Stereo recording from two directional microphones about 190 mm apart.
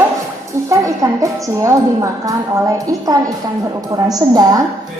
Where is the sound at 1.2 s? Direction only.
15° right (ahead or behind).